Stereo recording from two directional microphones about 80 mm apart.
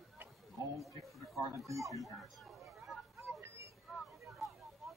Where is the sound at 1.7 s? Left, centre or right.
Right.